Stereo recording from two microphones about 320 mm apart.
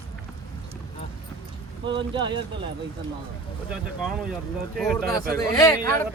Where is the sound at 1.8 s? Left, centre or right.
Centre.